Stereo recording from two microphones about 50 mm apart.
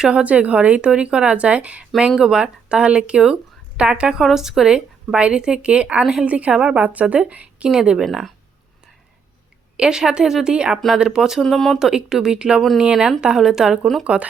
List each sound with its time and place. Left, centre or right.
0.0 s speech: right
2.0 s speech: centre
6.0 s speech: centre
6.2 s speech: right
7.7 s speech: centre
9.7 s speech: centre
10.8 s speech: centre
11.0 s speech: centre
11.3 s speech: centre
11.8 s speech: centre
14.0 s speech: right